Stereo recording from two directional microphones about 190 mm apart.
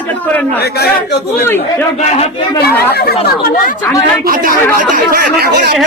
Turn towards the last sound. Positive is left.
turn(degrees=-55)  # may be behind; listen again after turning